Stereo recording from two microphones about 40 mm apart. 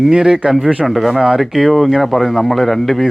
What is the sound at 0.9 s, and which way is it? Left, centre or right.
Speech, centre.